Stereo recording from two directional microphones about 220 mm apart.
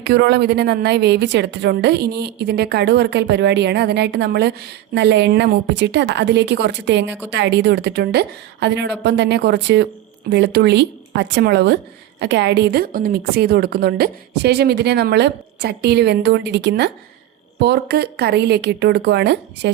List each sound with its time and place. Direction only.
0.0 s a woman's voice: 50° right (ahead or behind)